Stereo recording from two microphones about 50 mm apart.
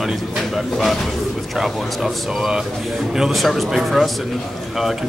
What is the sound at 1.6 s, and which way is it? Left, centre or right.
Speech, centre.